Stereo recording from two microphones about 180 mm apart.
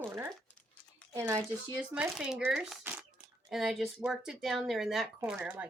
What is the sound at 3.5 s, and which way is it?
Speech, centre (ahead or behind).